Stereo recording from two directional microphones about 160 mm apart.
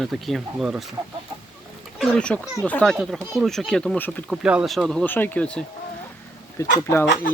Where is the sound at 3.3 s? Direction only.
Centre (ahead or behind).